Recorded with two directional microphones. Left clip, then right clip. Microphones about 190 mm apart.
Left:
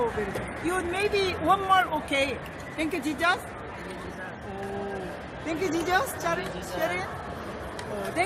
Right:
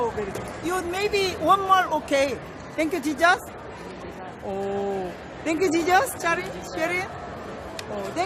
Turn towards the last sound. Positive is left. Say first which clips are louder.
# right 3 dB
turn(degrees=-35)  # may be behind; listen again after turning